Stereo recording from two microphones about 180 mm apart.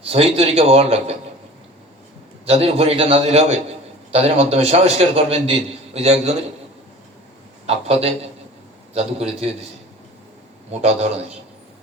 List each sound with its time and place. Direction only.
0.1 s a man's voice: 35° right (ahead or behind)
2.5 s a man's voice: 35° right (ahead or behind)
7.7 s a man's voice: 35° right (ahead or behind)
10.7 s a man's voice: 35° right (ahead or behind)